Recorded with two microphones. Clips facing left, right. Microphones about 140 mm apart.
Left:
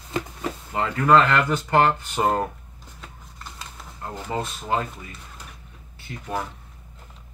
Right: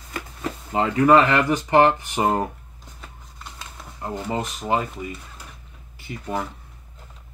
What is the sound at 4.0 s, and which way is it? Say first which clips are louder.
Speech: right 2 dB; 15° right (ahead or behind).